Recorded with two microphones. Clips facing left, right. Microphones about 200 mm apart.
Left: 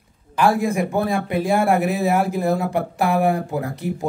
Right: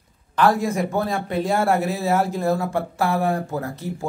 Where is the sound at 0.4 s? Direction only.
10° left (ahead or behind).